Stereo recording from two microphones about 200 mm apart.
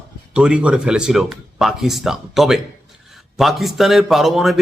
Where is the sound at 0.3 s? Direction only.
5° right (ahead or behind).